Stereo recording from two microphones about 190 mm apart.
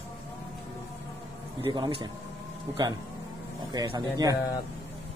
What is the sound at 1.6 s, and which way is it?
Speech, 25° right (ahead or behind).